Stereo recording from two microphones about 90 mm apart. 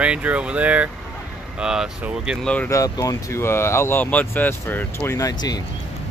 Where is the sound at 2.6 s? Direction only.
40° left (ahead or behind).